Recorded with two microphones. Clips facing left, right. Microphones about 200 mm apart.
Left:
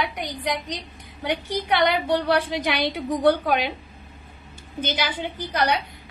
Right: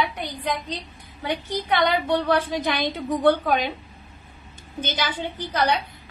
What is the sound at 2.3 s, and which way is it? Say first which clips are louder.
A woman's voice: even; 10° left (ahead or behind).